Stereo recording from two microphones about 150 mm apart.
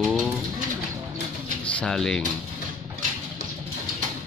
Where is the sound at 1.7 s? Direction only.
5° left (ahead or behind).